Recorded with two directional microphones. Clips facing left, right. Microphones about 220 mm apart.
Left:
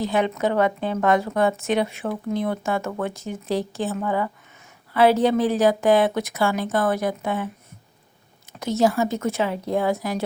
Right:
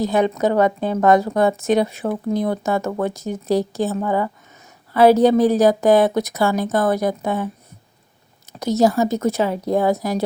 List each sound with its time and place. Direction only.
0.0 s a woman's voice: 40° right (ahead or behind)
8.5 s a woman's voice: 40° right (ahead or behind)